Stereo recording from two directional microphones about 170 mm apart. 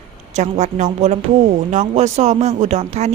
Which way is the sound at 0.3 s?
45° right (ahead or behind).